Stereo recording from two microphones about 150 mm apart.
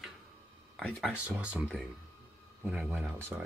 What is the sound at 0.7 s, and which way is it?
Speech, centre (ahead or behind).